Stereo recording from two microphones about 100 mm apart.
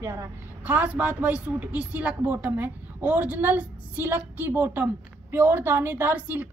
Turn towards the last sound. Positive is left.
turn(degrees=-15)  # may be behind; listen again after turning